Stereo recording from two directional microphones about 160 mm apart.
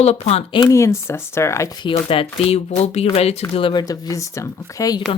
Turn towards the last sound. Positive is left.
turn(degrees=20)  # may be behind; listen again after turning